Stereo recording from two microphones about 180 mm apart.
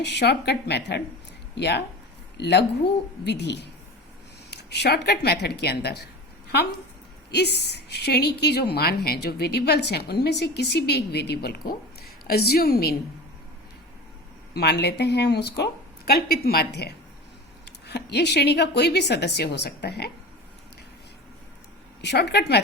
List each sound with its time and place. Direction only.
0.0 s a woman's voice: 70° left (ahead or behind)
7.3 s a woman's voice: 65° left (ahead or behind)
14.5 s a woman's voice: 65° left (ahead or behind)
22.0 s a woman's voice: 70° left (ahead or behind)